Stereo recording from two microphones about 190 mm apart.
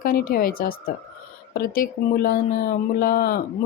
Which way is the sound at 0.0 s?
50° left (ahead or behind).